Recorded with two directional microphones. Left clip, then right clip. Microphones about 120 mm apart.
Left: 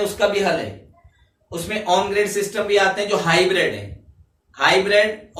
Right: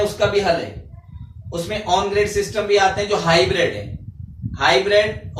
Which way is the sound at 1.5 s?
20° left (ahead or behind).